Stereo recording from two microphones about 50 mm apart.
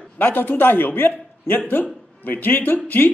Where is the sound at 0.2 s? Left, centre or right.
Left.